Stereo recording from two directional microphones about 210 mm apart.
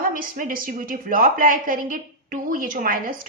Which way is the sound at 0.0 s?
40° right (ahead or behind).